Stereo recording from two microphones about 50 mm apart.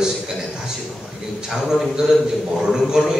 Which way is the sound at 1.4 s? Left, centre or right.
Centre.